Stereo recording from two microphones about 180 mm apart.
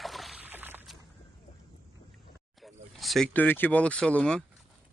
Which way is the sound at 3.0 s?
Centre (ahead or behind).